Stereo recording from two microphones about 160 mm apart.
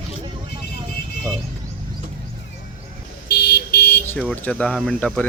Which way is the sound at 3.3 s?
90° left.